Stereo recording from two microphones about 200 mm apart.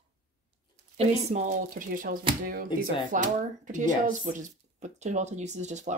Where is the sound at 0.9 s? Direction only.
40° right (ahead or behind).